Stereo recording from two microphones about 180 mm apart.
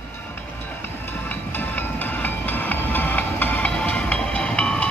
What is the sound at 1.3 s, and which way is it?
Train, 10° left (ahead or behind).